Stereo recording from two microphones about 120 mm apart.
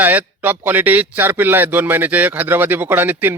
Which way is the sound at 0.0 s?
15° right (ahead or behind).